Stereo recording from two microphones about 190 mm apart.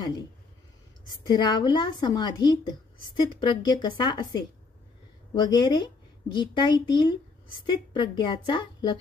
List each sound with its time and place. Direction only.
1.2 s a woman's voice: 25° left (ahead or behind)